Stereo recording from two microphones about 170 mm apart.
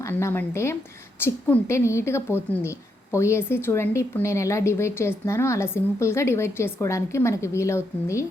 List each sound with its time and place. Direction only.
0.0 s a woman's voice: 15° left (ahead or behind)